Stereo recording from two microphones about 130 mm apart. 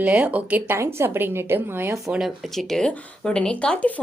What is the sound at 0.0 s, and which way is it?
A woman's voice, 10° right (ahead or behind).